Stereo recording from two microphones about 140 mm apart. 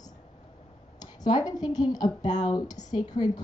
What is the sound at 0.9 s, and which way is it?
A woman's voice, 30° left (ahead or behind).